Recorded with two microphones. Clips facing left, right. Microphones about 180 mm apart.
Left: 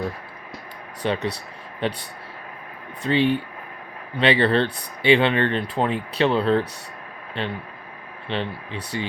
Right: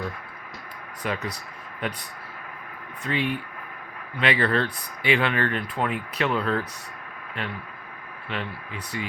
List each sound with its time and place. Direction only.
1.0 s speech: 30° left (ahead or behind)
3.0 s speech: 30° left (ahead or behind)